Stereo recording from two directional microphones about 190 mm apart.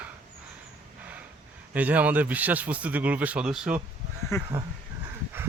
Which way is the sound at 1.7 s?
10° right (ahead or behind).